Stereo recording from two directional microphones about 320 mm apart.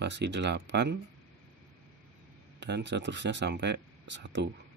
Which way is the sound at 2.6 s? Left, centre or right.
Right.